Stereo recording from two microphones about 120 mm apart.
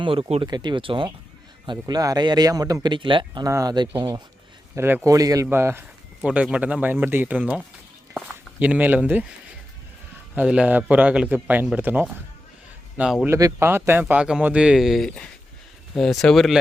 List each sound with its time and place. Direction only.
0.0 s speech: 50° right (ahead or behind)
0.4 s speech: 35° right (ahead or behind)
3.4 s speech: 30° right (ahead or behind)
5.5 s speech: 20° right (ahead or behind)
6.2 s speech: 10° right (ahead or behind)
10.3 s speech: 10° right (ahead or behind)
13.2 s speech: 20° right (ahead or behind); by 16.6 s centre (ahead or behind)